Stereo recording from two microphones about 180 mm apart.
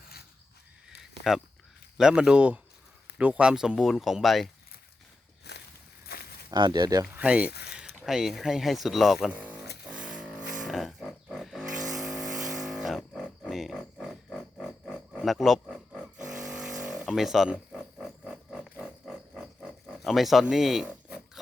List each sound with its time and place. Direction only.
0.9 s a sound: centre (ahead or behind)
2.0 s speech: 5° right (ahead or behind)
5.5 s walk: 65° left (ahead or behind)
6.1 s a sound: 60° left (ahead or behind)
6.5 s speech: 25° right (ahead or behind); by 9.6 s 10° right (ahead or behind)
9.9 s vehicle: 5° right (ahead or behind)
10.6 s pig: centre (ahead or behind)
11.9 s vehicle: centre (ahead or behind)
12.5 s a sound: centre (ahead or behind)